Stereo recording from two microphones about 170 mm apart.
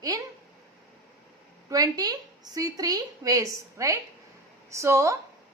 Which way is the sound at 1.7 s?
20° right (ahead or behind).